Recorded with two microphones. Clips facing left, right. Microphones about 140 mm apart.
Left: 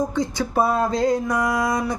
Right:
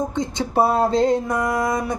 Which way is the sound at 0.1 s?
20° right (ahead or behind).